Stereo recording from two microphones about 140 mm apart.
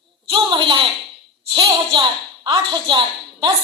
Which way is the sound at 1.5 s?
35° right (ahead or behind).